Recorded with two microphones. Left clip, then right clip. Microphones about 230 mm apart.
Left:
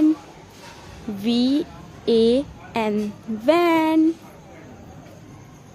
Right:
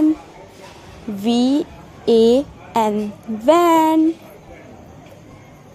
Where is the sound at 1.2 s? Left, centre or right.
Centre.